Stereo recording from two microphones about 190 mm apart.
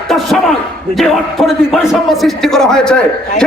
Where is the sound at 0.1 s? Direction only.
Centre (ahead or behind).